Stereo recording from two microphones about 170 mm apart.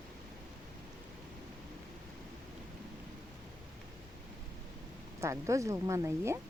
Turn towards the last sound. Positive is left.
turn(degrees=-15)  # may be behind; listen again after turning